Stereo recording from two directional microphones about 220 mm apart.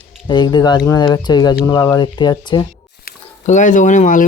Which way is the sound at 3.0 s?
35° left (ahead or behind).